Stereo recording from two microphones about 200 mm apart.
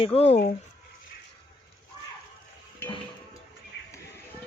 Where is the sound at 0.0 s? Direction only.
30° left (ahead or behind).